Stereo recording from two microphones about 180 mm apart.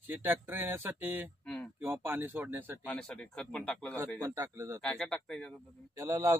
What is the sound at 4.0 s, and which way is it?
Speech, 15° right (ahead or behind).